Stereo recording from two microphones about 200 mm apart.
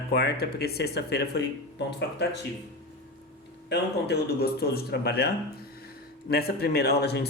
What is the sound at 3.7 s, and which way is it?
Speech, 55° left (ahead or behind).